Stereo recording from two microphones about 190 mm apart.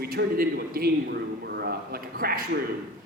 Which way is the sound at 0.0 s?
55° right (ahead or behind).